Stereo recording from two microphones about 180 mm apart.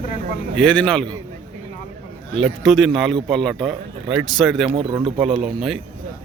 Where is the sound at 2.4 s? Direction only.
Centre (ahead or behind).